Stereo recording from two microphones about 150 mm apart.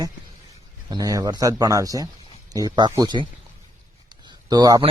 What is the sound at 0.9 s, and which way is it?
Speech, 25° right (ahead or behind).